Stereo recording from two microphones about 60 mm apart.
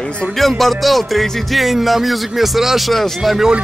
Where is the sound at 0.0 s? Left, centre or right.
Centre.